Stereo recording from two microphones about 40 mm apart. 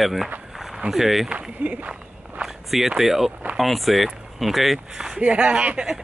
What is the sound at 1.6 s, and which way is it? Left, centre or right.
Speech, right.